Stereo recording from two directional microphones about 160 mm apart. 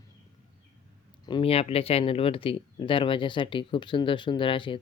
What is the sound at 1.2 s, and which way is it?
Speech, 30° left (ahead or behind).